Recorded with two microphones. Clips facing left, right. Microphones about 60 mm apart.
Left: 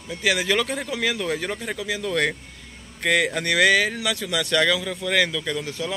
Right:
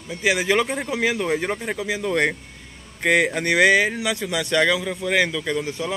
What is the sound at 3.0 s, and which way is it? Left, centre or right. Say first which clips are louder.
Speech: right 2 dB; centre.